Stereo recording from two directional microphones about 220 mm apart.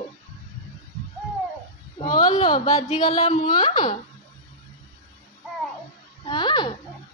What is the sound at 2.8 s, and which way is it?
A woman's voice, 30° left (ahead or behind).